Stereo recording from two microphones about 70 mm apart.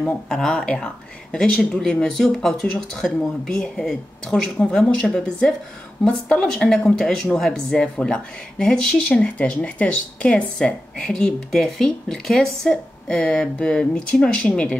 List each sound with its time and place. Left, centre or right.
0.3 s speech: centre